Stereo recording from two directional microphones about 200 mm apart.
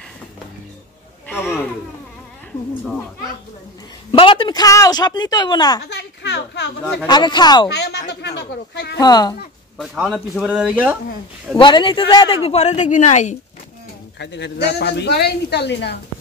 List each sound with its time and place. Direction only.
4.1 s speech: 25° left (ahead or behind)
5.9 s a sound: 60° left (ahead or behind)
7.1 s speech: 20° left (ahead or behind)
7.7 s speech: 55° left (ahead or behind)
8.9 s speech: 20° left (ahead or behind)
9.8 s speech: centre (ahead or behind)
11.5 s speech: 25° left (ahead or behind)
14.1 s speech: 60° left (ahead or behind)